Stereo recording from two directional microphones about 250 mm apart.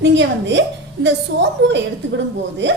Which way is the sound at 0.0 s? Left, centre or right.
Right.